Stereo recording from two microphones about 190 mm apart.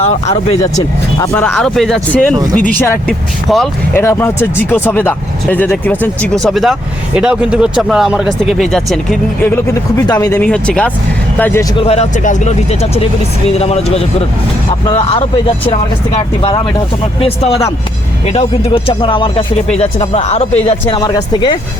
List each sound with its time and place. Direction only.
0.0 s speech: 35° left (ahead or behind)
1.2 s speech: 10° left (ahead or behind)
3.5 s speech: centre (ahead or behind)
3.9 s speech: 15° left (ahead or behind)
10.1 s speech: 15° left (ahead or behind)
10.5 s speech: 5° left (ahead or behind)
11.8 s speech: 35° left (ahead or behind)
20.7 s speech: 25° left (ahead or behind)